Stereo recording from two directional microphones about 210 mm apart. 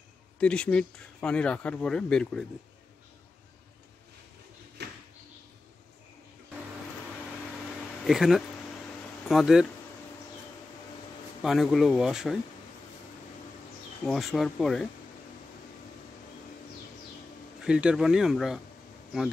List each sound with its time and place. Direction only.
0.4 s speech: 5° left (ahead or behind)
4.8 s a sound: 55° right (ahead or behind)
8.0 s speech: centre (ahead or behind)
11.4 s speech: centre (ahead or behind)
14.0 s speech: centre (ahead or behind)
17.6 s speech: 5° right (ahead or behind)